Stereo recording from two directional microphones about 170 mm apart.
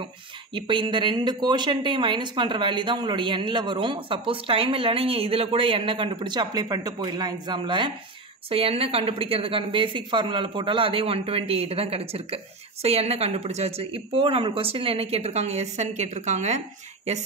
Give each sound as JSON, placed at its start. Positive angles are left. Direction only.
{"t": 0.6, "sound": "speech", "side_deg": -30}